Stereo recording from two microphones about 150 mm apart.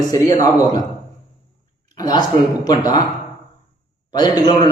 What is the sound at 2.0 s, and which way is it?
Speech, 25° left (ahead or behind).